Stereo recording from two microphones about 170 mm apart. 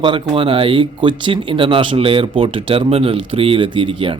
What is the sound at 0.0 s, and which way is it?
A man's voice, 30° right (ahead or behind).